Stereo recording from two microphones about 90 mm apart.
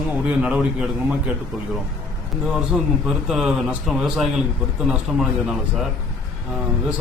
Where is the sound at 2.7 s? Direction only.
5° right (ahead or behind).